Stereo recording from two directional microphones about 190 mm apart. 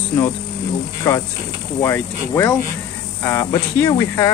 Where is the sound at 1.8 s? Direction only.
15° left (ahead or behind).